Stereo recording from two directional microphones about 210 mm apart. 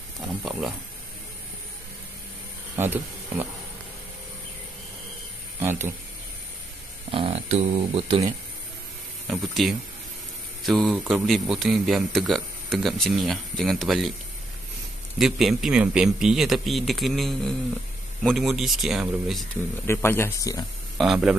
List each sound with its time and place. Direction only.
0.4 s a man's voice: centre (ahead or behind)
2.7 s speech: 10° right (ahead or behind)
5.6 s speech: 10° right (ahead or behind)
7.1 s speech: 25° right (ahead or behind)
9.3 s a man's voice: centre (ahead or behind)
15.1 s a man's voice: centre (ahead or behind)
19.9 s speech: 10° left (ahead or behind)
21.0 s a man's voice: centre (ahead or behind)